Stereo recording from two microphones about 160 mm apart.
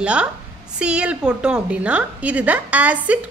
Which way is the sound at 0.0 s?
5° right (ahead or behind).